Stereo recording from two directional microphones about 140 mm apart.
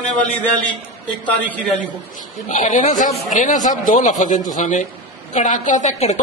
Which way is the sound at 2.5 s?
60° left (ahead or behind).